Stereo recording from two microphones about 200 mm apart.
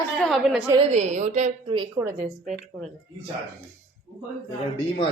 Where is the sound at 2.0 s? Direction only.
Centre (ahead or behind).